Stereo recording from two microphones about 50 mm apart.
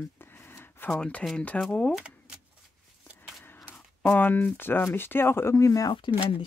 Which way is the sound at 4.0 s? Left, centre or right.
Left.